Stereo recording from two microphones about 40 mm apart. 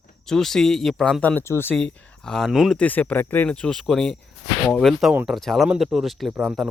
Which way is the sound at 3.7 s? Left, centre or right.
Centre.